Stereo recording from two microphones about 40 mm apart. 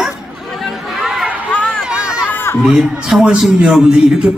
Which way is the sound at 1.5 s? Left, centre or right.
Left.